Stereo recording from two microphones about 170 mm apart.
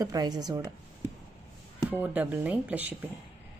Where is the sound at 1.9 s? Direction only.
10° right (ahead or behind).